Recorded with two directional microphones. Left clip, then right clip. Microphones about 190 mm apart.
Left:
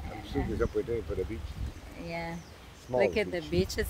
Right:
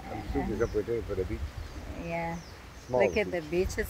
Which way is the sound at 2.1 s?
5° right (ahead or behind).